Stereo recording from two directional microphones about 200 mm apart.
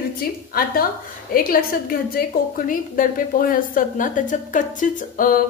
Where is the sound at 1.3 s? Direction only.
45° left (ahead or behind).